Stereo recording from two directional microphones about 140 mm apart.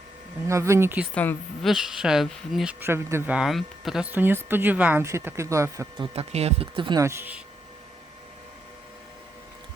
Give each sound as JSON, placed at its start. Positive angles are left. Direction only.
{"t": 0.4, "sound": "speech", "side_deg": -20}
{"t": 1.1, "sound": "a woman's voice", "side_deg": 15}
{"t": 1.6, "sound": "speech", "side_deg": -5}
{"t": 2.8, "sound": "speech", "side_deg": -20}
{"t": 3.3, "sound": "speech", "side_deg": 0}
{"t": 6.0, "sound": "speech", "side_deg": -45}
{"t": 7.0, "sound": "speech", "side_deg": -20}